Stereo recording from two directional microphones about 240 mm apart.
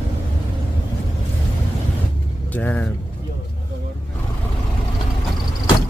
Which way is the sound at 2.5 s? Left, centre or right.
Centre.